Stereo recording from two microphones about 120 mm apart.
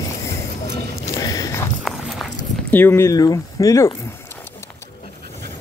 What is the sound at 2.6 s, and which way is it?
Speech, 15° left (ahead or behind).